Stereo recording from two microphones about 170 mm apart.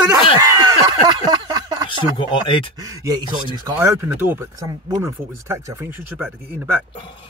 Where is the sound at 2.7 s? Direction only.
20° right (ahead or behind).